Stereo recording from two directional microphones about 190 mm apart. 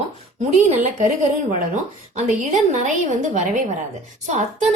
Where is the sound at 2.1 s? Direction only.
40° right (ahead or behind).